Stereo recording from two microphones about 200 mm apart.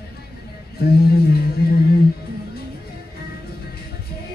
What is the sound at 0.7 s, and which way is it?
Music, 50° left (ahead or behind).